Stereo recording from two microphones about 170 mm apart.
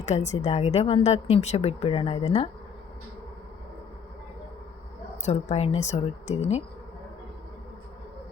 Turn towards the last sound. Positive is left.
turn(degrees=40)  # may be behind; listen again after turning